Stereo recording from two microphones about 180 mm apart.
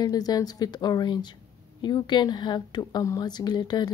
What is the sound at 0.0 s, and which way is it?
A woman's voice, 20° left (ahead or behind).